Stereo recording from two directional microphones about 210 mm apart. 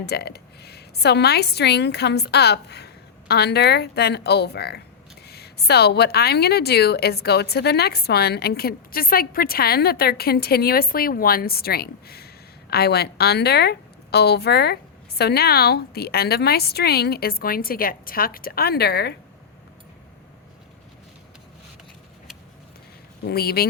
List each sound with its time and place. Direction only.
0.0 s speech: 50° left (ahead or behind)
23.2 s speech: 50° left (ahead or behind)